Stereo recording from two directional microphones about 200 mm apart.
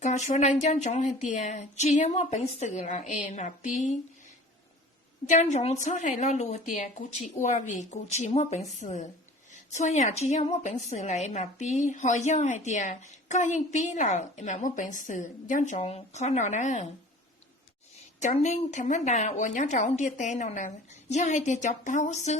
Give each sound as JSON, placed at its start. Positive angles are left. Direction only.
{"t": 0.0, "sound": "a woman's voice", "side_deg": 35}
{"t": 5.3, "sound": "a woman's voice", "side_deg": 35}
{"t": 18.2, "sound": "a woman's voice", "side_deg": 35}